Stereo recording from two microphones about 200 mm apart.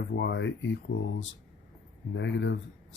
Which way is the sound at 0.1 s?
60° left (ahead or behind).